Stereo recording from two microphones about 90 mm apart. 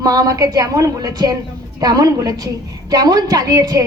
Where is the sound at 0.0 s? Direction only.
45° right (ahead or behind).